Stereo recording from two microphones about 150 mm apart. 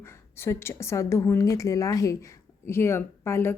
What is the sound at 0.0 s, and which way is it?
A woman's voice, 15° left (ahead or behind).